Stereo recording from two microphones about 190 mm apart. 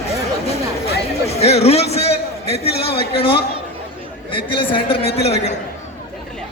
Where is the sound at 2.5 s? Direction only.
55° left (ahead or behind).